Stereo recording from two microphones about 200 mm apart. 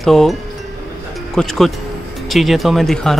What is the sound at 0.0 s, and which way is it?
Speech, centre (ahead or behind).